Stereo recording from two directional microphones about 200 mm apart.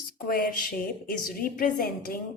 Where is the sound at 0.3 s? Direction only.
45° left (ahead or behind).